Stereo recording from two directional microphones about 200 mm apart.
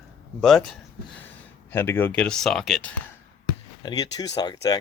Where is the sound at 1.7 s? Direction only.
10° left (ahead or behind).